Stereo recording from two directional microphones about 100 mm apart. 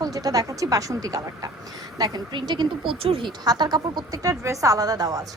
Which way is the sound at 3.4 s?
40° right (ahead or behind).